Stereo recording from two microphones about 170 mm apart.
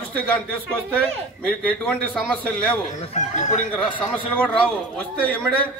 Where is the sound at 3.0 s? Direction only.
40° left (ahead or behind).